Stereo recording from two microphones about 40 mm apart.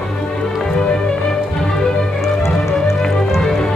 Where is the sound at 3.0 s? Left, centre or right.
Centre.